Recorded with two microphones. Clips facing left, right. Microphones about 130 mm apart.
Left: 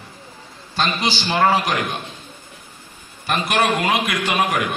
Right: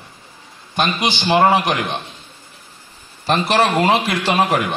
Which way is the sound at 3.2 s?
30° right (ahead or behind).